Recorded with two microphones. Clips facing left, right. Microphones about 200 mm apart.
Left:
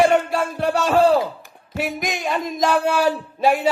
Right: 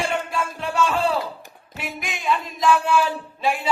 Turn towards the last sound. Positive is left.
turn(degrees=40)  # may be behind; listen again after turning